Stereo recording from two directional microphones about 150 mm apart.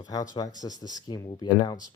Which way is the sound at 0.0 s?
25° left (ahead or behind).